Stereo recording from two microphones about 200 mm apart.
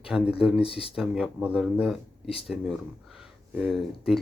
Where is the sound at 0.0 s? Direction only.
5° right (ahead or behind).